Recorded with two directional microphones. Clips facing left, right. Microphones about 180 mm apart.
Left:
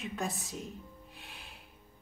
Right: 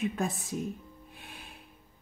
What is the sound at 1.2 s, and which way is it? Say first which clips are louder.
Music: right 3 dB; 50° right (ahead or behind).